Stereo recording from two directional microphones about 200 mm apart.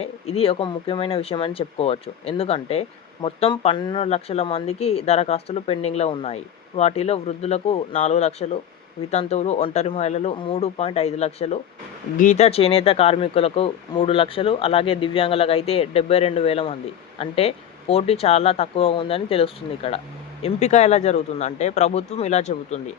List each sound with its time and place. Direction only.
0.0 s speech: 30° left (ahead or behind)